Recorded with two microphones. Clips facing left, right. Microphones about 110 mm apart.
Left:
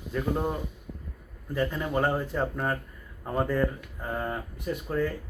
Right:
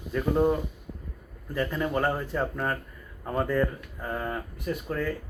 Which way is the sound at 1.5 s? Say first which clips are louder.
Even; 15° left (ahead or behind).